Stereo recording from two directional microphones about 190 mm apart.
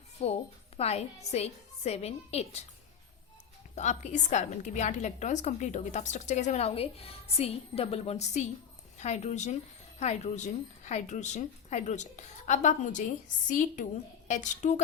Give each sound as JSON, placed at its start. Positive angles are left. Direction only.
{"t": 0.2, "sound": "a woman's voice", "side_deg": 35}
{"t": 3.8, "sound": "a woman's voice", "side_deg": 40}